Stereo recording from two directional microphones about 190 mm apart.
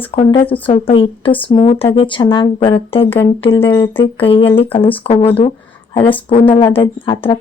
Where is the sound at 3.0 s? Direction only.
10° left (ahead or behind).